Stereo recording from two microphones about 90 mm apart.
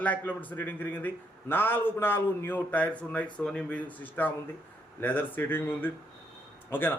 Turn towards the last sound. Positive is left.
turn(degrees=20)  # may be behind; listen again after turning